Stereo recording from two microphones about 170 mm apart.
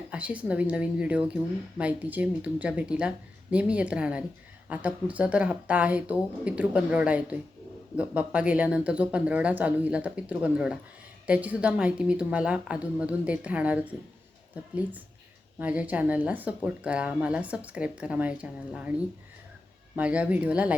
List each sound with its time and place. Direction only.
0.1 s speech: 10° right (ahead or behind)
20.0 s speech: 5° right (ahead or behind)